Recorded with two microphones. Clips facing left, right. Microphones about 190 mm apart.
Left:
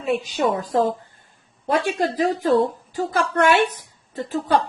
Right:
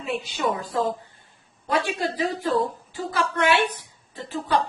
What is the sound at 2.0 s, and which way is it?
A woman's voice, 45° left (ahead or behind).